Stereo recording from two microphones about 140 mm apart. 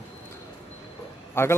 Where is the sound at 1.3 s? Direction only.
20° left (ahead or behind).